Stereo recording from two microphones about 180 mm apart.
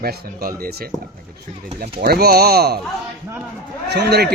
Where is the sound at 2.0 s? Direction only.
60° right (ahead or behind).